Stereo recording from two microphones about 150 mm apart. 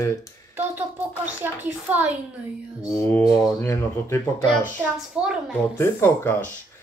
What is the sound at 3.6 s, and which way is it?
Speech, 20° left (ahead or behind).